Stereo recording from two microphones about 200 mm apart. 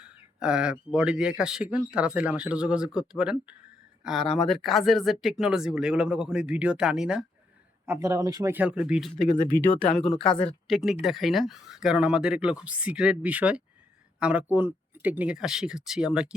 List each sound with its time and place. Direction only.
0.1 s speech: 5° right (ahead or behind)
7.9 s speech: 15° right (ahead or behind)
9.2 s speech: 40° left (ahead or behind)
9.7 s speech: 5° left (ahead or behind)